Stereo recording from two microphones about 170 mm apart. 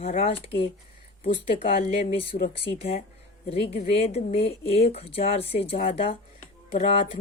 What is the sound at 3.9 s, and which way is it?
Speech, 35° left (ahead or behind).